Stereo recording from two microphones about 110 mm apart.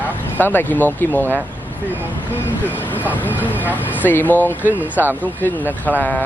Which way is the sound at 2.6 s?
15° left (ahead or behind).